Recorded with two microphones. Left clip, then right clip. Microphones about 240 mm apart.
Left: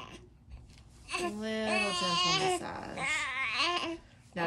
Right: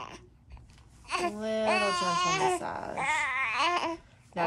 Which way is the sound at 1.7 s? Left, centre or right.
Centre.